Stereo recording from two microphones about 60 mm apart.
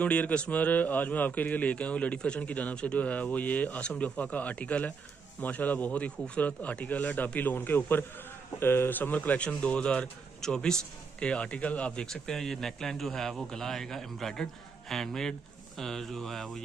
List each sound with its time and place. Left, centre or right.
0.0 s a man's voice: left; by 16.6 s centre